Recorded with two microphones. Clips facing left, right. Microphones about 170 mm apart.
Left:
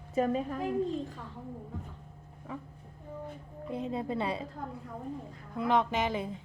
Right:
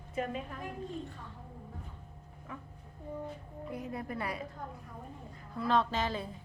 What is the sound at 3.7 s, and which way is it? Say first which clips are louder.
Speech: left 6 dB; 25° left (ahead or behind).